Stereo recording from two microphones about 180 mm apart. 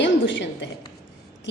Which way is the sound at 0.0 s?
90° left.